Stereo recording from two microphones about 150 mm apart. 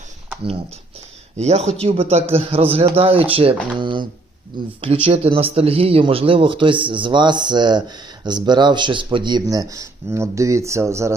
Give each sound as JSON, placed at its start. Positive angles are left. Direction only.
{"t": 1.4, "sound": "speech", "side_deg": -45}
{"t": 5.0, "sound": "speech", "side_deg": -40}